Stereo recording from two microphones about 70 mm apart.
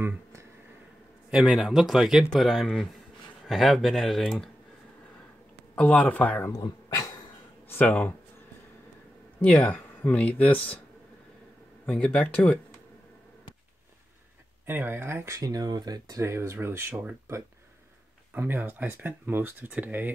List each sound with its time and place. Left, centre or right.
0.0 s a sound: right
1.3 s speech: centre
2.3 s speech: centre
5.8 s speech: left
6.5 s dog: left
7.8 s speech: left
9.4 s speech: centre
11.8 s speech: centre
14.7 s speech: right
15.4 s speech: right
16.2 s speech: right
18.3 s speech: right